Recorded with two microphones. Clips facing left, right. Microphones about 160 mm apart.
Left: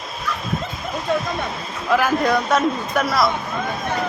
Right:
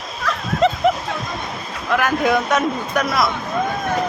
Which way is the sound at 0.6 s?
90° right.